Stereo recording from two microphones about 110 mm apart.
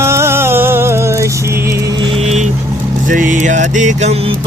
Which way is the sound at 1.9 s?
40° right (ahead or behind).